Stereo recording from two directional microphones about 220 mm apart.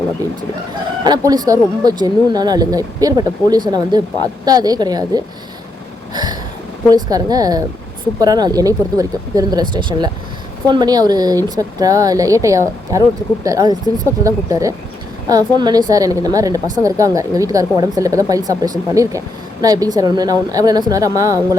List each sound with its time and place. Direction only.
1.0 s speech: 20° right (ahead or behind)
6.9 s speech: 15° right (ahead or behind)